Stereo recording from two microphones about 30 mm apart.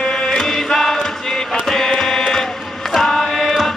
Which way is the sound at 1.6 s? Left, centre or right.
Centre.